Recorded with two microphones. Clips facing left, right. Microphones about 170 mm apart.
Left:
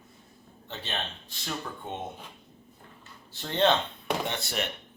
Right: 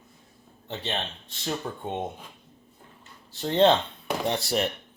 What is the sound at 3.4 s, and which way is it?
Speech, 30° right (ahead or behind).